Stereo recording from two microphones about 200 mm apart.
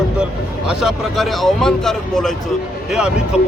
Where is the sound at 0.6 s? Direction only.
Centre (ahead or behind).